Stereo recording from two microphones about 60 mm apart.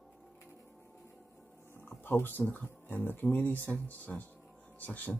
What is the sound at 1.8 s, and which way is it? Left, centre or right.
Speech, left.